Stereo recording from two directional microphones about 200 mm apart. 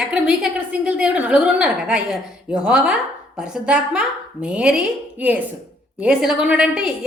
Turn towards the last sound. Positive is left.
turn(degrees=-5)  # may be behind; listen again after turning